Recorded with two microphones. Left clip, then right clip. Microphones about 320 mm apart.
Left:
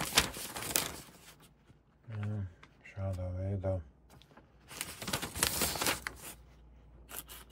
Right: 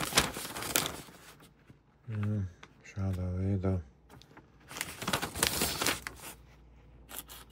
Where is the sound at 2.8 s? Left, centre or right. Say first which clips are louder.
Even; centre.